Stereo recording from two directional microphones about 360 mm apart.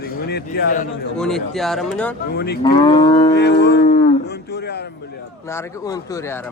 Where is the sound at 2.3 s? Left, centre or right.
Left.